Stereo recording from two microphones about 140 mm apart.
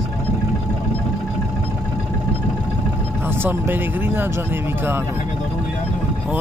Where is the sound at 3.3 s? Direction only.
15° right (ahead or behind).